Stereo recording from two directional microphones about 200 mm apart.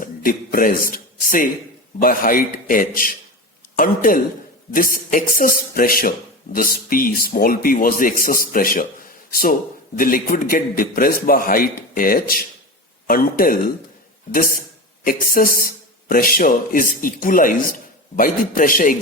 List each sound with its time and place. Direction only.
0.0 s a man's voice: 45° left (ahead or behind)